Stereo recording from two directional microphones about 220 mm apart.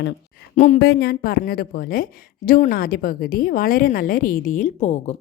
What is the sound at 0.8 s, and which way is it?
A woman's voice, 45° left (ahead or behind).